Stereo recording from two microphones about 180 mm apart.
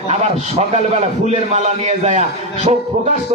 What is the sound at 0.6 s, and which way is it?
A man's voice, 40° right (ahead or behind).